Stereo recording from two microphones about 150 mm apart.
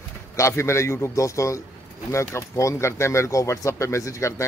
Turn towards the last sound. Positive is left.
turn(degrees=20)  # may be behind; listen again after turning